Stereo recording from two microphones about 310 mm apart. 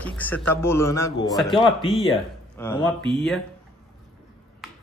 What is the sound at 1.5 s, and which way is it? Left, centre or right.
Speech, centre.